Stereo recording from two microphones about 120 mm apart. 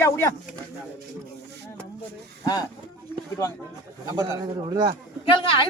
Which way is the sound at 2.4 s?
35° left (ahead or behind).